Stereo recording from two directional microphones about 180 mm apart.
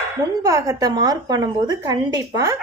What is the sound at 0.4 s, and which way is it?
Speech, 20° right (ahead or behind).